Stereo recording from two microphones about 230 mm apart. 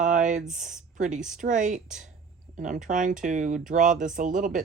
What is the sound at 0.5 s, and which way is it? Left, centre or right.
Speech, right.